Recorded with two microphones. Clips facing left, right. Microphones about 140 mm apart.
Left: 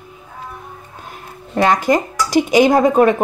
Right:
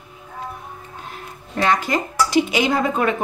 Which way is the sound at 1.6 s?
40° left (ahead or behind).